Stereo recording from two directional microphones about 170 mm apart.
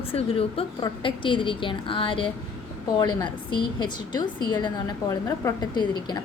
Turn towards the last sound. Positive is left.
turn(degrees=25)  # may be behind; listen again after turning